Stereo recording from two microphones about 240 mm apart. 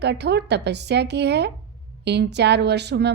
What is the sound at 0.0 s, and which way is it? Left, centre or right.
Speech, right.